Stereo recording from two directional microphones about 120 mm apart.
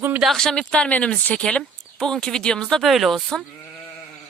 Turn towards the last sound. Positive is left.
turn(degrees=5)  # may be behind; listen again after turning